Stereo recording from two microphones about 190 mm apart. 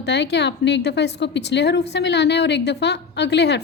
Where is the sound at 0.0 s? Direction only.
65° left (ahead or behind).